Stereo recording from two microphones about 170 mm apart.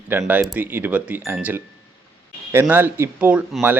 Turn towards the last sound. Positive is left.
turn(degrees=-10)  # may be behind; listen again after turning